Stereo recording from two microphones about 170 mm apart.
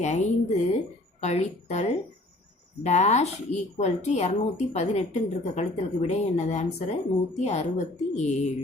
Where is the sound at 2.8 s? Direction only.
40° left (ahead or behind).